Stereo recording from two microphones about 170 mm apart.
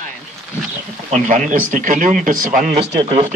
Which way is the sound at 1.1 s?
45° right (ahead or behind).